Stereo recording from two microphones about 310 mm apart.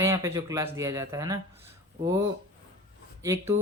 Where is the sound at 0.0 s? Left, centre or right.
Centre.